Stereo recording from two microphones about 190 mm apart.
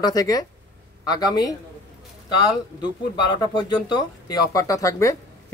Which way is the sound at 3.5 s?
25° left (ahead or behind).